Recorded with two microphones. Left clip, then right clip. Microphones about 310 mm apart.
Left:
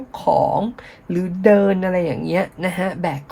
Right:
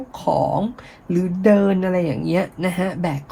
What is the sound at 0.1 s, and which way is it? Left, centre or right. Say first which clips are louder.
Speech: left 3 dB; left.